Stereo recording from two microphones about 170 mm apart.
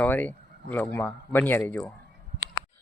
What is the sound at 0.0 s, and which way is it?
Speech, 10° left (ahead or behind).